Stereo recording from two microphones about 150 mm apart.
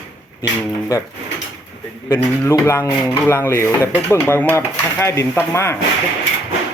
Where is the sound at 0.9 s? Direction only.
20° left (ahead or behind).